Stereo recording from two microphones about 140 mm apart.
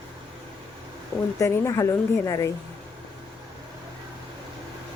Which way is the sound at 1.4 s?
20° left (ahead or behind).